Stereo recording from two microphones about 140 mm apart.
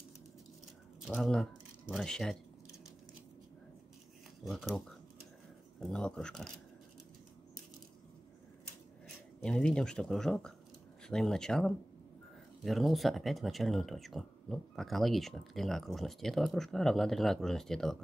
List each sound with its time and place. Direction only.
1.1 s speech: 5° left (ahead or behind)
4.5 s speech: centre (ahead or behind)
9.4 s speech: 5° left (ahead or behind)